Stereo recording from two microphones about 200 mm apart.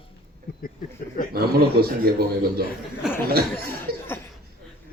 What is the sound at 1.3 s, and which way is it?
A man's voice, 50° right (ahead or behind).